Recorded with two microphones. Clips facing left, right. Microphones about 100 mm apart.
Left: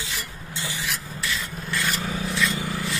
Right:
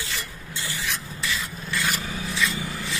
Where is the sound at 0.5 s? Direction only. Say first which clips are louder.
Left 1 dB; 20° left (ahead or behind).